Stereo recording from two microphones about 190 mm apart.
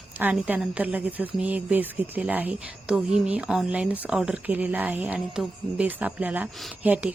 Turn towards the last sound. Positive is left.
turn(degrees=-5)  # may be behind; listen again after turning